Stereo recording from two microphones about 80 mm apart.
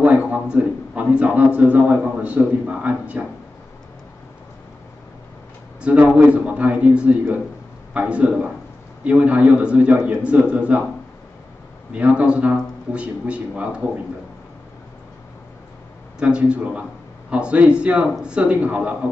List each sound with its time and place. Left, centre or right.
0.0 s a man's voice: centre
5.8 s speech: centre
11.9 s speech: centre
16.2 s speech: centre